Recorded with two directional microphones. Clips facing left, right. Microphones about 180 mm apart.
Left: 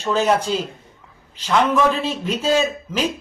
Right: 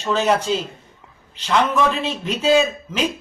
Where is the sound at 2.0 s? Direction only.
10° left (ahead or behind).